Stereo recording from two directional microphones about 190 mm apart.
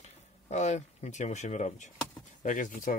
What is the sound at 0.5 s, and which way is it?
Speech, 40° left (ahead or behind).